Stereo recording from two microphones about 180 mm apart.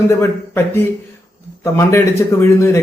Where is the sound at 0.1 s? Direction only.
15° left (ahead or behind).